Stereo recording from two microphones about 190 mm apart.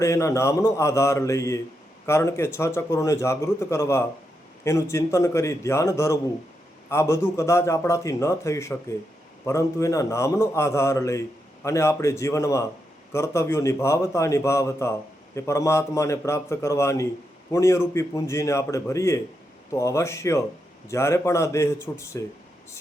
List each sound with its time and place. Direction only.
0.0 s a man's voice: 15° left (ahead or behind)